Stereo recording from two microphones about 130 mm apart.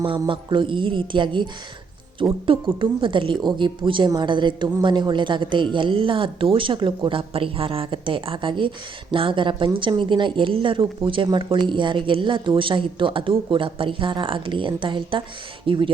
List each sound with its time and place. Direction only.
0.0 s a woman's voice: 40° right (ahead or behind)
2.5 s a woman's voice: 40° right (ahead or behind)